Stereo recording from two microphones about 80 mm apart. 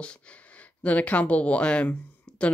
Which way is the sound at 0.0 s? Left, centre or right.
Centre.